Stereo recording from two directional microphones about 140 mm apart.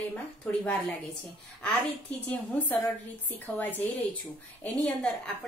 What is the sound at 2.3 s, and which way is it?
Speech, 10° left (ahead or behind).